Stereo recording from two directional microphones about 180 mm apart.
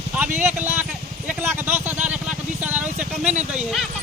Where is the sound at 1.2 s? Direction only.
10° right (ahead or behind).